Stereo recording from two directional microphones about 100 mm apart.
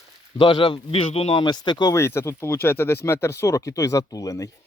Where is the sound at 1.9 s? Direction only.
25° left (ahead or behind).